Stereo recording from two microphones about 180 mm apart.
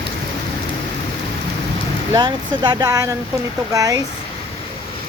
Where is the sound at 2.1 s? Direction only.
20° right (ahead or behind).